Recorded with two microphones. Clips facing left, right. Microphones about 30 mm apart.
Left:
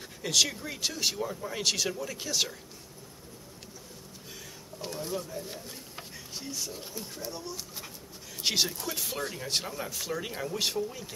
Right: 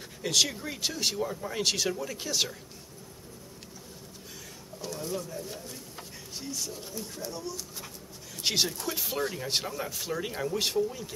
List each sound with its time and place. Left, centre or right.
0.2 s speech: centre
4.8 s a sound: left
5.1 s speech: centre
8.4 s speech: centre